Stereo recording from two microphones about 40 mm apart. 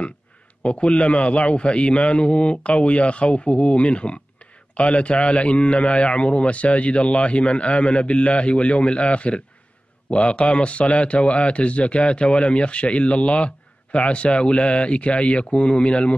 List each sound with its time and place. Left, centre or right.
0.6 s a man's voice: left